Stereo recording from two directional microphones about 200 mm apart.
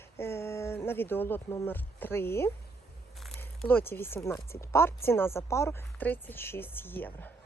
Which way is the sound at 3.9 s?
10° left (ahead or behind).